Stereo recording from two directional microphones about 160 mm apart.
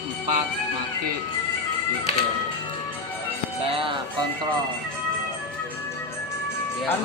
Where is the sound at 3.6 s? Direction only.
35° right (ahead or behind).